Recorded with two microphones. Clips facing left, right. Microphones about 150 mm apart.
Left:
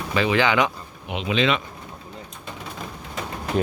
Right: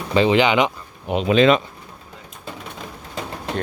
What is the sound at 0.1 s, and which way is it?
Speech, 25° right (ahead or behind).